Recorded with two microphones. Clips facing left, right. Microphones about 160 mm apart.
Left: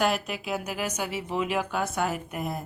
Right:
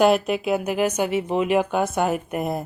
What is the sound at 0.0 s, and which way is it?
Speech, 20° right (ahead or behind).